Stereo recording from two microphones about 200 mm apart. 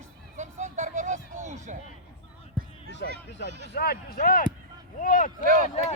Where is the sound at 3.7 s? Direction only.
50° left (ahead or behind).